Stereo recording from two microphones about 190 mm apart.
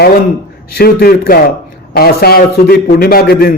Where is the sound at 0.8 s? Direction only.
50° left (ahead or behind).